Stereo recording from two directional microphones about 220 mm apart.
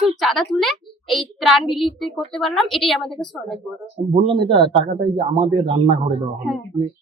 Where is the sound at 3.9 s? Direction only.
25° right (ahead or behind).